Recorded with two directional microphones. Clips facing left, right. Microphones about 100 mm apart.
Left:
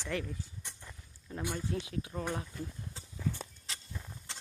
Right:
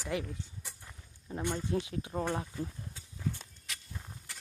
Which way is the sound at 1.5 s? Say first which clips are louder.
Right 2 dB; 30° right (ahead or behind).